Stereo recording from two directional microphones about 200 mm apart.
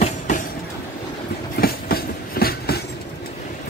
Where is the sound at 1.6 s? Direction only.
50° left (ahead or behind).